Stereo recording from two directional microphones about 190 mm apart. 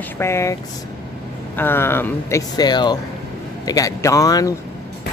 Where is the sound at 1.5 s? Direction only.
10° left (ahead or behind).